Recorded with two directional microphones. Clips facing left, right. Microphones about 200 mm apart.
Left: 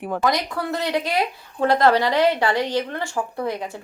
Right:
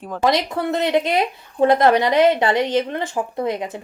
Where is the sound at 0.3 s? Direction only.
25° right (ahead or behind).